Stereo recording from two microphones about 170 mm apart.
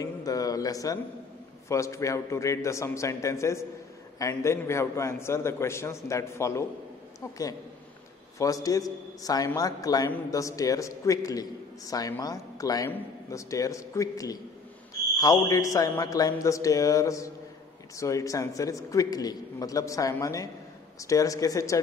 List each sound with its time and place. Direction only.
0.0 s a man's voice: 20° left (ahead or behind)